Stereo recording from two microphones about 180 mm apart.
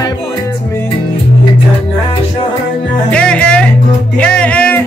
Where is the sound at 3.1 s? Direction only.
5° left (ahead or behind).